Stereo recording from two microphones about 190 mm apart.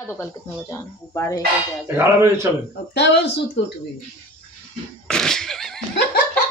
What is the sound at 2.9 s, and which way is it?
Speech, 65° left (ahead or behind).